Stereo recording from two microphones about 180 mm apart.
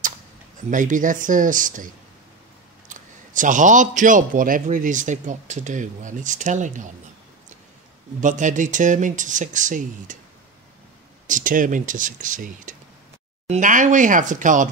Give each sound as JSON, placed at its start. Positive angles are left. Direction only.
{"t": 0.7, "sound": "a man's voice", "side_deg": -45}
{"t": 2.9, "sound": "a man's voice", "side_deg": -45}
{"t": 8.2, "sound": "a man's voice", "side_deg": -45}
{"t": 11.2, "sound": "a man's voice", "side_deg": -45}